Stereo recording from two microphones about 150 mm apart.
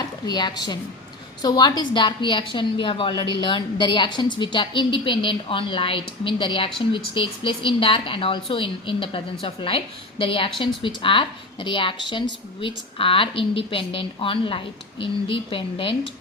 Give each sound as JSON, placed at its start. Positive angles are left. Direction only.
{"t": 0.0, "sound": "a woman's voice", "side_deg": 30}